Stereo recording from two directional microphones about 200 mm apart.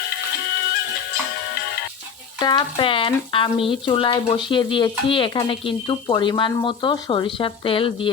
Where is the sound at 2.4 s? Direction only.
20° left (ahead or behind).